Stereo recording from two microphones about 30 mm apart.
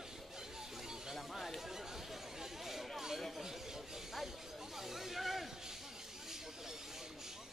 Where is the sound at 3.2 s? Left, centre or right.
Centre.